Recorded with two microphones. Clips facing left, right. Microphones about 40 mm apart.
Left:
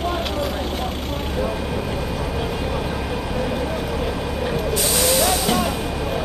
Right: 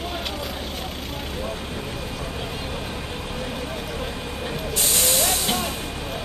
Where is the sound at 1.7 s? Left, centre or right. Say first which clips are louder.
Left 6 dB; left.